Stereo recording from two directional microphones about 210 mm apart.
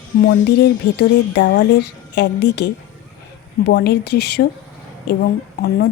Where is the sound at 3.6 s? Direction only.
50° left (ahead or behind).